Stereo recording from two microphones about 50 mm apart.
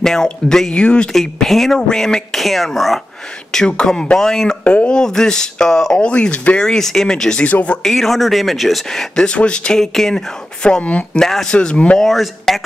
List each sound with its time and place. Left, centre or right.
0.0 s speech: centre
1.1 s speech: centre
2.3 s speech: centre
3.5 s speech: centre
4.6 s speech: left
6.6 s speech: centre
7.4 s speech: left
7.8 s speech: centre
9.2 s speech: centre
9.8 s speech: centre
10.6 s speech: left
11.1 s speech: centre
12.0 s speech: centre